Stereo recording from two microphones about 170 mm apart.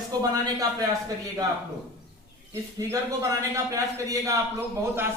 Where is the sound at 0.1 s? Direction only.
25° right (ahead or behind).